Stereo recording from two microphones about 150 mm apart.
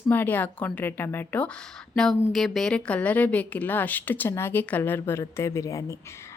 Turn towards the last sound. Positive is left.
turn(degrees=20)  # may be behind; listen again after turning